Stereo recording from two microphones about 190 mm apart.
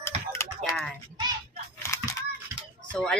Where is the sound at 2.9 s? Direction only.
5° left (ahead or behind).